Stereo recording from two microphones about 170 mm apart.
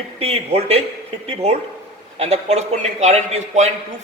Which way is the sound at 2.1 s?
40° right (ahead or behind).